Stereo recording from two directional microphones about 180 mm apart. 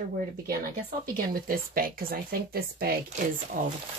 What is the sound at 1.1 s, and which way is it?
Speech, 50° right (ahead or behind).